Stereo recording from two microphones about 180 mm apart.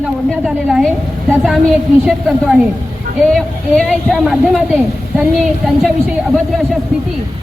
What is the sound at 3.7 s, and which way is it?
A woman's voice, centre (ahead or behind).